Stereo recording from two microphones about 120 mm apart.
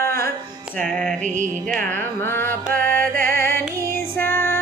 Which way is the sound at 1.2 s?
90° right.